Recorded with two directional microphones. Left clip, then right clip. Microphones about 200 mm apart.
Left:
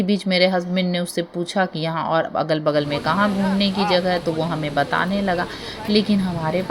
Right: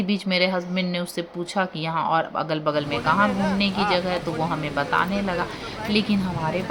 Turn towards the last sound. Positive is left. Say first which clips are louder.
# left 3 dB
turn(degrees=20)  # may be behind; listen again after turning